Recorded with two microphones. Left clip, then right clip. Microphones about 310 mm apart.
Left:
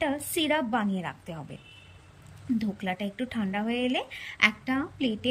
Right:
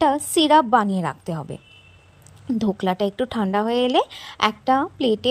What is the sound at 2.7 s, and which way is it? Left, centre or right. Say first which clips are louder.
A woman's voice: right 11 dB; centre.